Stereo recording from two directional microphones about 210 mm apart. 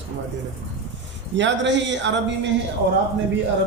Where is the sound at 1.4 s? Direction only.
60° right (ahead or behind).